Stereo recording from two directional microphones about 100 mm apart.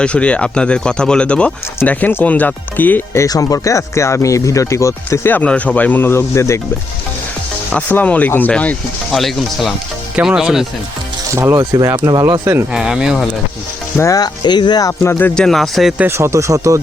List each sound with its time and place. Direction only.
0.0 s speech: 10° left (ahead or behind)
3.2 s speech: 40° left (ahead or behind)
5.3 s speech: 15° left (ahead or behind)
7.7 s speech: 15° left (ahead or behind)
9.1 s speech: centre (ahead or behind)
11.3 s speech: 30° right (ahead or behind)
12.7 s speech: 5° right (ahead or behind)
13.9 s speech: 30° left (ahead or behind)
14.4 s speech: 45° left (ahead or behind)
15.4 s speech: 5° left (ahead or behind)
16.0 s speech: 25° right (ahead or behind)